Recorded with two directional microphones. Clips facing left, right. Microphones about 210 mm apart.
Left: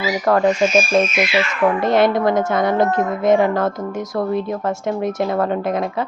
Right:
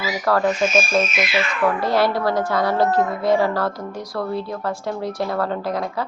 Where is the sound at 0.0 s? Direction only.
20° left (ahead or behind).